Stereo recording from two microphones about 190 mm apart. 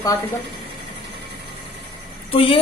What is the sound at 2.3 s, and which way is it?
Speech, 30° left (ahead or behind).